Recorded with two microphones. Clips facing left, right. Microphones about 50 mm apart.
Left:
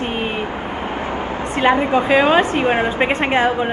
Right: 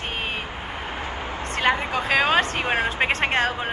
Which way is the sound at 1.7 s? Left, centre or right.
Left.